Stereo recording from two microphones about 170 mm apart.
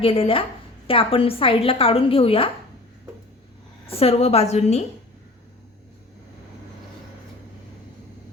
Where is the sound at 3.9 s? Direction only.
35° left (ahead or behind).